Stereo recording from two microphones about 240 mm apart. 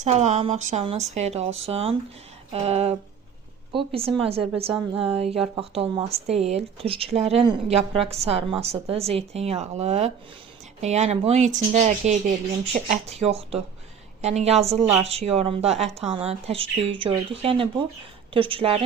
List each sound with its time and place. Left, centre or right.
0.0 s a woman's voice: right